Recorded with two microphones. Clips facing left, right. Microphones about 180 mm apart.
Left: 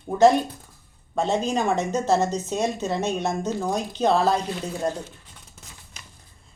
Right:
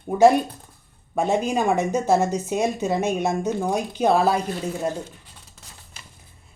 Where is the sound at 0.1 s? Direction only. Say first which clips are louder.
Right 1 dB; 10° right (ahead or behind).